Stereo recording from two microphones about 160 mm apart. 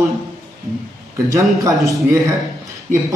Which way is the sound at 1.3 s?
20° right (ahead or behind).